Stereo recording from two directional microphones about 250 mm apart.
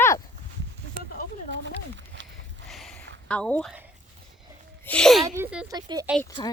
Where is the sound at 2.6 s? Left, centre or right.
Centre.